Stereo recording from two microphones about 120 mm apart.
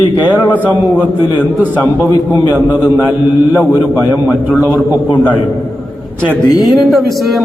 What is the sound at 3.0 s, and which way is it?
Mantra, 15° right (ahead or behind).